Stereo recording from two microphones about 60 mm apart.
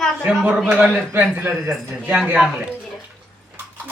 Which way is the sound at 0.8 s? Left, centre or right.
Centre.